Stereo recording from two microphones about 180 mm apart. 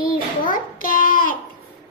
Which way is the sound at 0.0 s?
50° left (ahead or behind).